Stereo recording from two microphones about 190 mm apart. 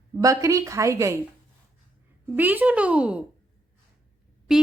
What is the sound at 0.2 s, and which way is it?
Speech, 15° right (ahead or behind).